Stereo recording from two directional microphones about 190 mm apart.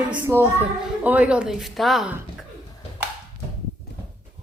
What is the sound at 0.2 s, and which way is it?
Speech, 10° right (ahead or behind).